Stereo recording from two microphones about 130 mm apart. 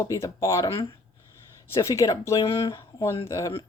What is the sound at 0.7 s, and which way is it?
Speech, 40° left (ahead or behind).